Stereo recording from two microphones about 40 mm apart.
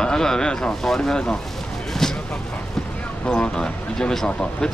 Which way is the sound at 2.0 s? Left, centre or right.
Centre.